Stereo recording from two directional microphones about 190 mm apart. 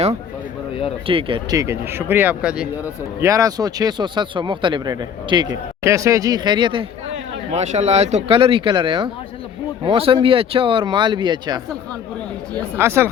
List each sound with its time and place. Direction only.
1.0 s speech: 25° right (ahead or behind)
12.7 s speech: 15° right (ahead or behind)